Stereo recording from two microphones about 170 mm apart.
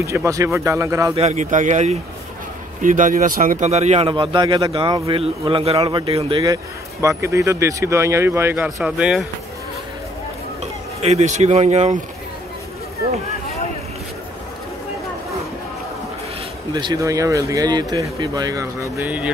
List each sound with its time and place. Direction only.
0.0 s speech: 15° right (ahead or behind)
1.1 s speech: 40° right (ahead or behind)
4.1 s speech: 30° right (ahead or behind)
6.4 s speech: 20° right (ahead or behind); by 9.3 s 5° right (ahead or behind)
10.6 s speech: 40° right (ahead or behind)
16.7 s speech: 20° right (ahead or behind)